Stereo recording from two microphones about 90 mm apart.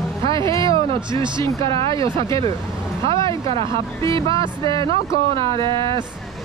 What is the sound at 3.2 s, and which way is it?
Speech, 70° right (ahead or behind).